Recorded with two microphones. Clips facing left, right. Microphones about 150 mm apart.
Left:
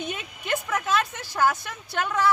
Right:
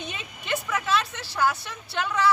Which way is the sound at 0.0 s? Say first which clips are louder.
Left 4 dB; 50° left (ahead or behind).